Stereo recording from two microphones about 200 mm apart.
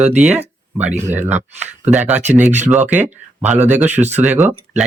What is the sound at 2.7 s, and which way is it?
Speech, 10° right (ahead or behind).